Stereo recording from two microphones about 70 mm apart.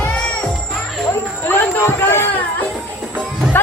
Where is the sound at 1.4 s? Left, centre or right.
Left.